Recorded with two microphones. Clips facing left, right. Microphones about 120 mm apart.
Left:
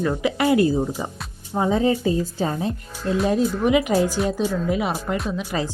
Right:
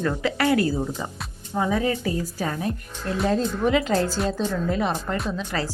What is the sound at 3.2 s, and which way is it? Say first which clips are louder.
Speech: left 1 dB; 10° left (ahead or behind).